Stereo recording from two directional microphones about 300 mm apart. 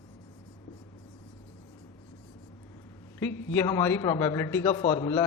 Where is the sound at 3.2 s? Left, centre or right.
Centre.